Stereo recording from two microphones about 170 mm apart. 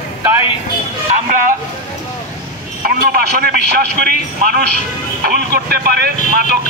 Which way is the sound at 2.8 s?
55° right (ahead or behind).